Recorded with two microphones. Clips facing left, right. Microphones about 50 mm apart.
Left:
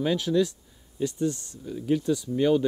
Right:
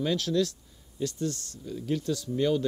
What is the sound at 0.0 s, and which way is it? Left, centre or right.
Speech, centre.